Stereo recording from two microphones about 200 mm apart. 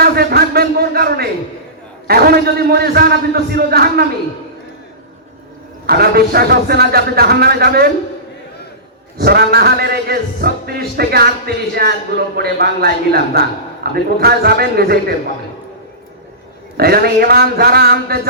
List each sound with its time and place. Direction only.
0.0 s a sound: 50° right (ahead or behind)
2.0 s a man's voice: 50° right (ahead or behind)
5.8 s a man's voice: 50° right (ahead or behind)
9.1 s a man's voice: 50° right (ahead or behind)
16.7 s a man's voice: 50° right (ahead or behind)